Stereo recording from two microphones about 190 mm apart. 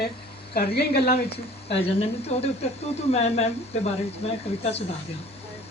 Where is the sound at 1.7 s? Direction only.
35° left (ahead or behind).